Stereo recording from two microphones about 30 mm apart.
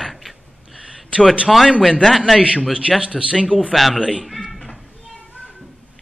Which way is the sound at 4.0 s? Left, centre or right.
Centre.